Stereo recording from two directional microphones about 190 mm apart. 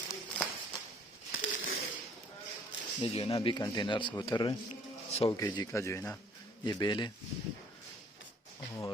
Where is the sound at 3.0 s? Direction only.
30° left (ahead or behind).